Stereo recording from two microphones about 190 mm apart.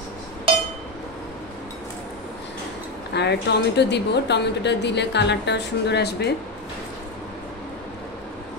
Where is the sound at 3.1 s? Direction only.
65° left (ahead or behind).